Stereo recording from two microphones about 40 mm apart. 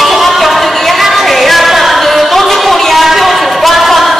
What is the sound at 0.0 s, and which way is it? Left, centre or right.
Music, centre.